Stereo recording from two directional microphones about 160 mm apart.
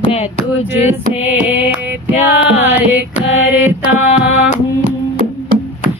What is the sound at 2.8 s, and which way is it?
Carnatic music, 10° right (ahead or behind).